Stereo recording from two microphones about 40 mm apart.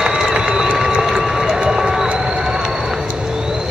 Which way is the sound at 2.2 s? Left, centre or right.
Centre.